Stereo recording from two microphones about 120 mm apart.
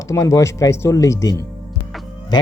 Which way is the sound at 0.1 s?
25° left (ahead or behind).